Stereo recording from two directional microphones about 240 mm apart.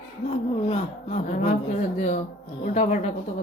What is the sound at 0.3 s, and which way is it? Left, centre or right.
A woman's voice, left.